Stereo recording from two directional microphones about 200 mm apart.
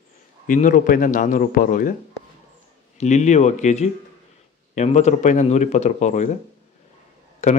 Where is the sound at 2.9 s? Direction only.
35° left (ahead or behind).